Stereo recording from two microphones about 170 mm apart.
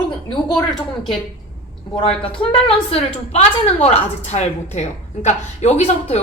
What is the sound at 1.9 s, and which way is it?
A woman's voice, 30° left (ahead or behind).